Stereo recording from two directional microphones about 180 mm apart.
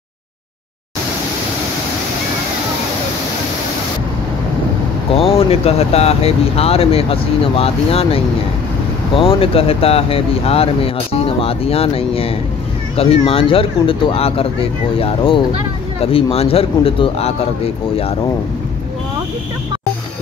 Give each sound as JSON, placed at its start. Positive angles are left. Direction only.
{"t": 5.1, "sound": "speech", "side_deg": 35}